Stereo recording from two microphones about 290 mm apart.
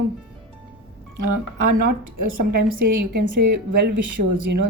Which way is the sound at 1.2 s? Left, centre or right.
Right.